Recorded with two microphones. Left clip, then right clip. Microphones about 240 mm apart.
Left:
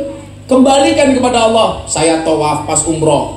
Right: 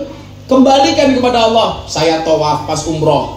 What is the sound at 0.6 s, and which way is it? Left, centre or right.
A man's voice, left.